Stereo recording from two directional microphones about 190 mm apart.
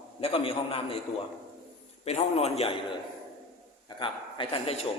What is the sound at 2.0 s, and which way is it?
Speech, 35° left (ahead or behind).